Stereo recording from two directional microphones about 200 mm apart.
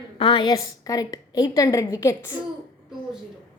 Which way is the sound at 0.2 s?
25° left (ahead or behind).